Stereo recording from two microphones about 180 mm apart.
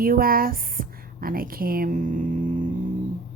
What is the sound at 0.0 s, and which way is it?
Speech, 55° right (ahead or behind).